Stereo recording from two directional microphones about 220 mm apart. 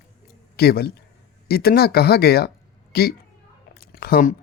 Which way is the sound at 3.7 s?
45° left (ahead or behind).